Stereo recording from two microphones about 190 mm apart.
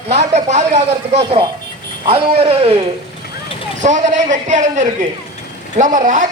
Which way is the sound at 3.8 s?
40° right (ahead or behind).